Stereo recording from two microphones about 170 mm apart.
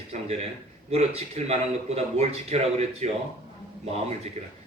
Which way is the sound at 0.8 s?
40° right (ahead or behind).